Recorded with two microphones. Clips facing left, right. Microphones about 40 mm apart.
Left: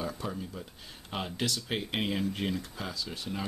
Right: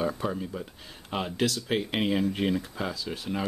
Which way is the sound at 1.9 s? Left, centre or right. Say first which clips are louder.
Right 3 dB; centre.